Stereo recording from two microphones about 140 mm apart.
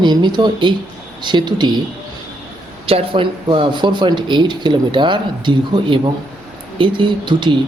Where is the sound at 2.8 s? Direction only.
40° right (ahead or behind).